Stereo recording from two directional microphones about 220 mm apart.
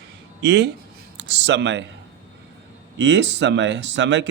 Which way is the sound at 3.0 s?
55° right (ahead or behind).